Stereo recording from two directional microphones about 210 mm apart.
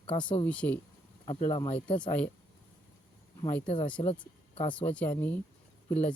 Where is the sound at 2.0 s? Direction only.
5° left (ahead or behind).